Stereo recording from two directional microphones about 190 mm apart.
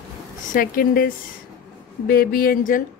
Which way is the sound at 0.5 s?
50° left (ahead or behind).